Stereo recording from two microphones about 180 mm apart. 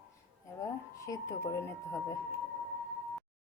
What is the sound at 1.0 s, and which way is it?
A woman's voice, 15° left (ahead or behind).